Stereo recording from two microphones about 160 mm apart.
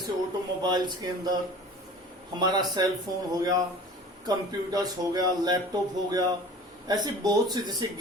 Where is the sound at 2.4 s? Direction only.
25° right (ahead or behind).